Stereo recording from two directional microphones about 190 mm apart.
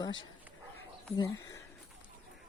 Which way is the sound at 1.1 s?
20° left (ahead or behind).